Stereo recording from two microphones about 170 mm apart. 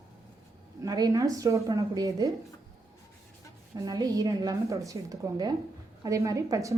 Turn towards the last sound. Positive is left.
turn(degrees=-20)  # may be behind; listen again after turning